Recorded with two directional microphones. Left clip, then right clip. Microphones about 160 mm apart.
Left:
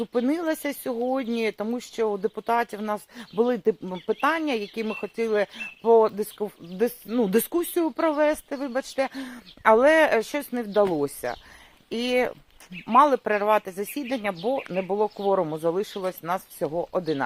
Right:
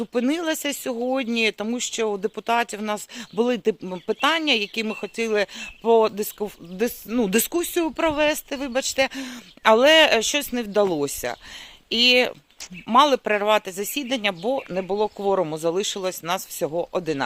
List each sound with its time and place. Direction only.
0.0 s speech: 35° right (ahead or behind)